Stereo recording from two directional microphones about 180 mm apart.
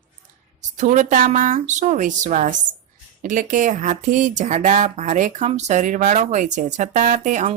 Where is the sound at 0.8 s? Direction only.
45° right (ahead or behind).